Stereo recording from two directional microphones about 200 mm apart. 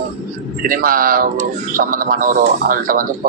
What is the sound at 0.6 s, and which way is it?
Speech, 45° right (ahead or behind).